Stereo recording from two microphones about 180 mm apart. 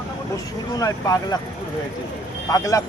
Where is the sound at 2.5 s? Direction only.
20° left (ahead or behind).